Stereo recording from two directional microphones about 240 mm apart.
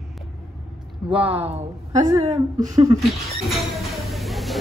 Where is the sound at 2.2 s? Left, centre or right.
Right.